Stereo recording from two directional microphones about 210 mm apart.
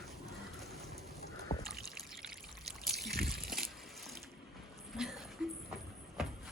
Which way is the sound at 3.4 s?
Centre (ahead or behind).